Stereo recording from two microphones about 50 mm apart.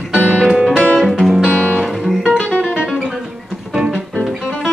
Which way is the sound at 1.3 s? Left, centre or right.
Centre.